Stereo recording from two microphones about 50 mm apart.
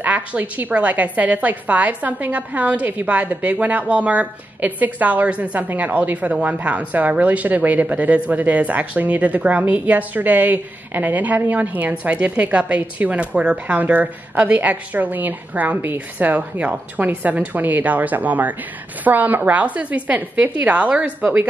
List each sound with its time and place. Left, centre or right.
0.0 s speech: right
21.2 s speech: right